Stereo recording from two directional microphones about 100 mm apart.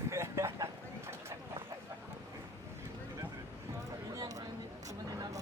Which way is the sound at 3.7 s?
30° right (ahead or behind).